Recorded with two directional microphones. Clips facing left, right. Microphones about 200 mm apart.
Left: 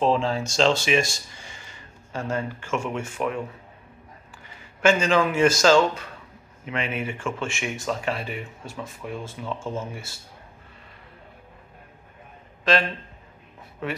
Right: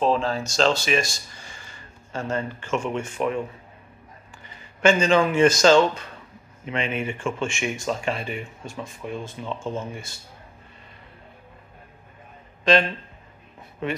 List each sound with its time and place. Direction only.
0.1 s speech: 20° left (ahead or behind); by 3.4 s 5° left (ahead or behind)
4.8 s speech: 5° left (ahead or behind)
12.7 s speech: 5° left (ahead or behind)